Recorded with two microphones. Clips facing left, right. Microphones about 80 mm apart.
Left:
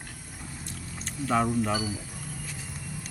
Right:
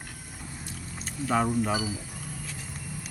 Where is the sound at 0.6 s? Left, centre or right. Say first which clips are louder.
Even; centre.